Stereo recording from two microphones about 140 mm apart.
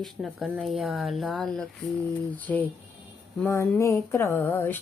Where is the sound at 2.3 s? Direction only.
10° left (ahead or behind).